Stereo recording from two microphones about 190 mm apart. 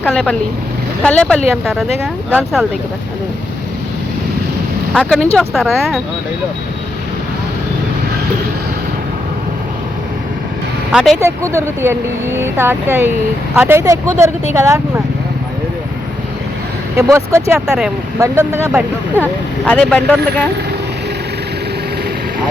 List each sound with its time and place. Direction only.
0.0 s speech: 5° left (ahead or behind)
4.9 s speech: 5° left (ahead or behind)
10.9 s speech: centre (ahead or behind)
11.2 s speech: 15° right (ahead or behind)
17.0 s speech: 15° right (ahead or behind)
17.5 s speech: 5° right (ahead or behind)
19.2 s speech: 5° left (ahead or behind)